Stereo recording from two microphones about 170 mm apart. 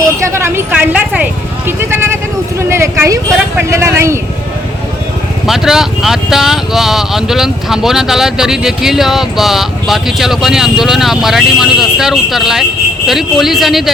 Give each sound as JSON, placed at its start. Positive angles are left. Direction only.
{"t": 0.2, "sound": "speech", "side_deg": -15}
{"t": 5.5, "sound": "speech", "side_deg": 0}